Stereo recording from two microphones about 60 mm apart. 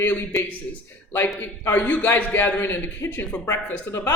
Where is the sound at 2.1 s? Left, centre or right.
Left.